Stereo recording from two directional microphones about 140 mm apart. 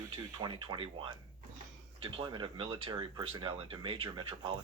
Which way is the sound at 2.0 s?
35° right (ahead or behind).